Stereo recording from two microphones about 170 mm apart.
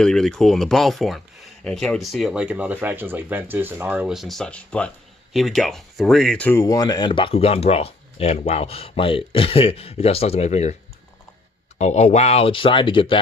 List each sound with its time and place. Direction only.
0.0 s speech: 5° left (ahead or behind); by 10.8 s 40° left (ahead or behind)
11.8 s speech: 40° left (ahead or behind)